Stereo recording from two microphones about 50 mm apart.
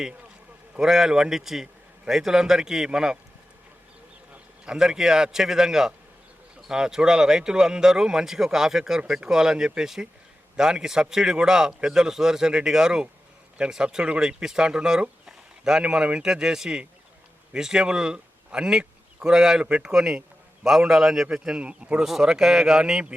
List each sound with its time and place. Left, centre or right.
0.8 s speech: centre
4.6 s speech: centre
15.3 s a sound: centre
15.8 s speech: centre
21.9 s speech: centre